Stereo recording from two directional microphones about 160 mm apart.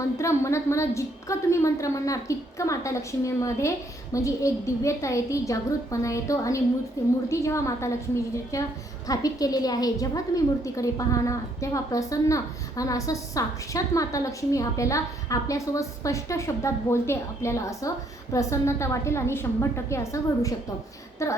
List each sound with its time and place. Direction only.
0.2 s a woman's voice: 20° left (ahead or behind)